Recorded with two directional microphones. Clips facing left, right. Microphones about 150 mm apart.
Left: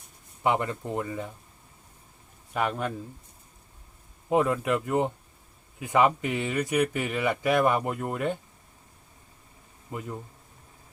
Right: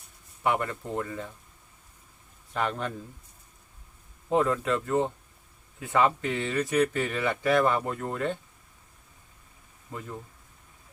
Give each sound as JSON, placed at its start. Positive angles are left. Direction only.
{"t": 0.4, "sound": "speech", "side_deg": 20}
{"t": 2.5, "sound": "speech", "side_deg": 10}
{"t": 4.3, "sound": "speech", "side_deg": 10}
{"t": 9.9, "sound": "speech", "side_deg": 20}